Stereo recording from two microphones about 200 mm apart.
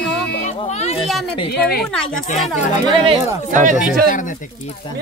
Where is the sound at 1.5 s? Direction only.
50° left (ahead or behind).